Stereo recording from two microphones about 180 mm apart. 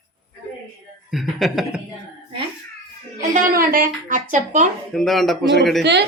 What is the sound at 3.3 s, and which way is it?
A woman's voice, 50° right (ahead or behind).